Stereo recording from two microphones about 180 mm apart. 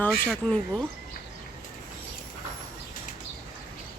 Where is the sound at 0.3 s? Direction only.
5° left (ahead or behind).